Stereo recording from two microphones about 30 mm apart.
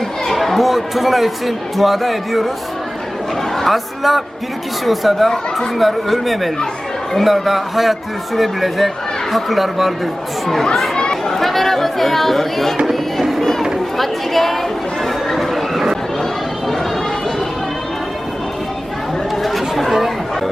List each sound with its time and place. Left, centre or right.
0.3 s speech: centre
3.6 s speech: centre
10.4 s speech: centre
10.9 s chatter: left
11.3 s chatter: centre
14.0 s a woman's voice: centre
15.0 s chatter: centre
19.4 s chatter: centre